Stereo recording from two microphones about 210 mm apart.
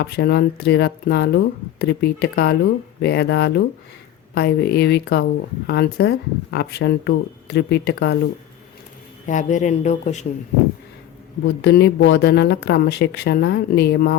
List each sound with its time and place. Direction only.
0.0 s speech: 50° left (ahead or behind)
9.2 s speech: 35° left (ahead or behind)
11.4 s speech: 55° left (ahead or behind)